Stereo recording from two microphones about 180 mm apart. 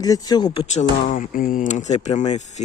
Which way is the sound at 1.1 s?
50° left (ahead or behind).